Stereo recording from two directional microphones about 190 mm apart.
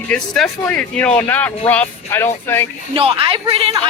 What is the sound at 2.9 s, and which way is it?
Speech, 30° right (ahead or behind).